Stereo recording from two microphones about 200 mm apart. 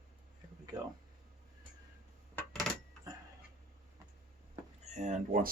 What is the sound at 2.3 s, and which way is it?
Coin, 5° left (ahead or behind).